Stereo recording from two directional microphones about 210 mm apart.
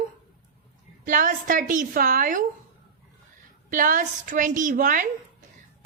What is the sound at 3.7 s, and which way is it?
A woman's voice, 40° right (ahead or behind).